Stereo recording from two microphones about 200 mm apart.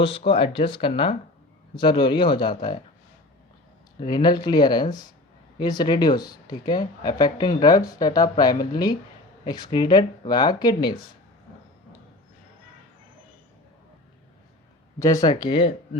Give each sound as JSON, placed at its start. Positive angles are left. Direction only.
{"t": 0.3, "sound": "speech", "side_deg": 25}
{"t": 4.0, "sound": "speech", "side_deg": 20}
{"t": 14.9, "sound": "speech", "side_deg": 15}